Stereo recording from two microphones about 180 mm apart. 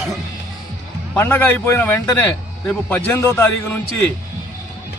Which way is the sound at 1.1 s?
10° left (ahead or behind).